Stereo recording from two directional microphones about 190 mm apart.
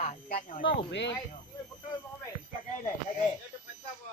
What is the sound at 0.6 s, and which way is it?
Speech, 70° left (ahead or behind).